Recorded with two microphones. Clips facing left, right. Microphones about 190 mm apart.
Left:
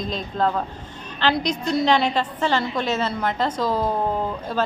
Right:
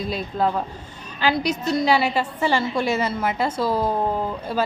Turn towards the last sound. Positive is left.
turn(degrees=-10)  # may be behind; listen again after turning